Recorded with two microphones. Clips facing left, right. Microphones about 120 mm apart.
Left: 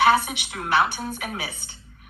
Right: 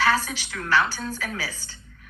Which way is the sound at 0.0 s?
15° left (ahead or behind).